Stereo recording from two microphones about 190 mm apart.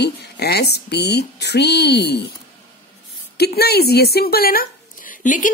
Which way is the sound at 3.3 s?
55° left (ahead or behind).